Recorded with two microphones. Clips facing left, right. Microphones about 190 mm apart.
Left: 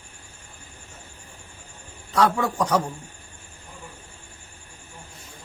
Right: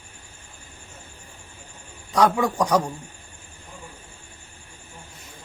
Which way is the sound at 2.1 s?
15° right (ahead or behind).